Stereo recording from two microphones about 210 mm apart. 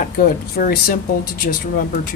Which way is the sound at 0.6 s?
45° left (ahead or behind).